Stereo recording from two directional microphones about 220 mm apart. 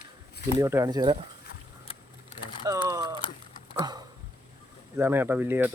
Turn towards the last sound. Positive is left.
turn(degrees=-10)  # may be behind; listen again after turning